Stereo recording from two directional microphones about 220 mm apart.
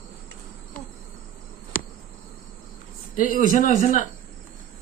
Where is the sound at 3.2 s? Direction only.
40° left (ahead or behind).